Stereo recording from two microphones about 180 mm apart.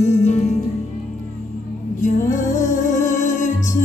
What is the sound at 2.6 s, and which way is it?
Music, 45° left (ahead or behind).